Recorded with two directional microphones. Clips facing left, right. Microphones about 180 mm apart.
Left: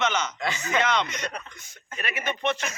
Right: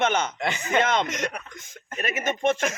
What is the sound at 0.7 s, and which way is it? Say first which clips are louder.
Speech: right 3 dB; 50° right (ahead or behind).